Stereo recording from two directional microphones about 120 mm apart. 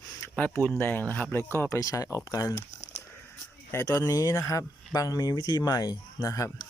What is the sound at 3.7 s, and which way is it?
Speech, 25° left (ahead or behind).